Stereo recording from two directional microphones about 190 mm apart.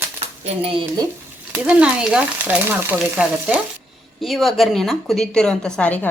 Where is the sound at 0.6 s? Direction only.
30° right (ahead or behind).